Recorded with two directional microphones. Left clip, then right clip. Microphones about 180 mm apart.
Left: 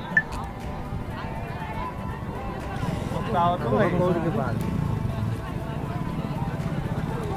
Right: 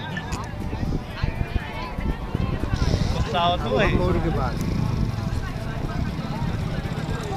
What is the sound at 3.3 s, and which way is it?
Speech, 5° left (ahead or behind).